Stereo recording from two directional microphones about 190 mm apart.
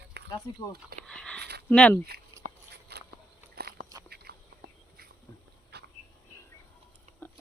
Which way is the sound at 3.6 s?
55° right (ahead or behind).